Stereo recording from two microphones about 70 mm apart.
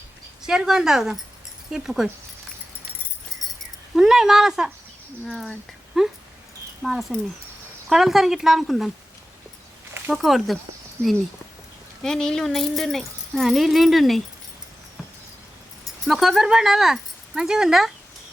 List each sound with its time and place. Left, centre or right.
0.4 s speech: centre
3.9 s speech: centre
5.2 s speech: centre
10.1 s speech: centre
11.0 s speech: right
12.0 s speech: centre
16.0 s speech: centre